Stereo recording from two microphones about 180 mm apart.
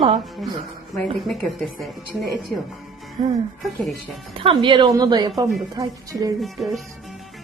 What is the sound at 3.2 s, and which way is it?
A woman's voice, 30° right (ahead or behind).